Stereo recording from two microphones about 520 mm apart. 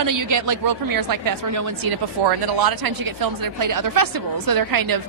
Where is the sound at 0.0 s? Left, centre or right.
Right.